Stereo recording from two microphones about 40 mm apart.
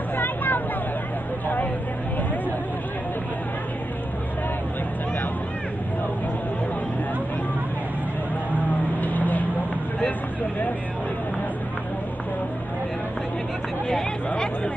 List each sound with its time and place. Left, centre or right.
0.1 s vehicle: left
8.5 s vehicle: left
14.3 s chatter: left